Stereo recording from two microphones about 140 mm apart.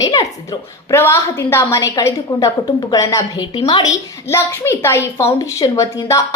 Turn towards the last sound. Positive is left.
turn(degrees=25)  # may be behind; listen again after turning